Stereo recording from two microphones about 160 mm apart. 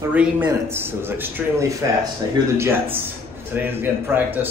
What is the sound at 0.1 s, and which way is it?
A man's voice, 10° right (ahead or behind).